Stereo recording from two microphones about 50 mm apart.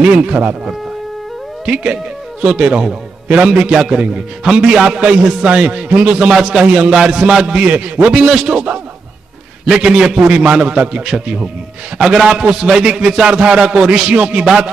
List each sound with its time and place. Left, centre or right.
0.0 s a man's voice: right
1.7 s a man's voice: right
5.0 s a man's voice: right
9.7 s a man's voice: centre